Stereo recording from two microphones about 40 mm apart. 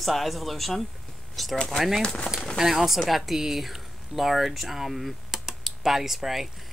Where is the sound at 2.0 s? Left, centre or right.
Left.